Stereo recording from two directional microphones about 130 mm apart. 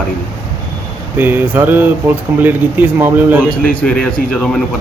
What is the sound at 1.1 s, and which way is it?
Speech, 15° right (ahead or behind).